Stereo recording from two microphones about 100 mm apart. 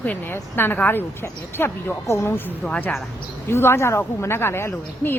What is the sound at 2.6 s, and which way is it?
Speech, 10° left (ahead or behind).